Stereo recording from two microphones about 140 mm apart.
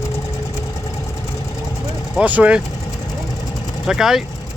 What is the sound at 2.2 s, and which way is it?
Speech, 10° right (ahead or behind).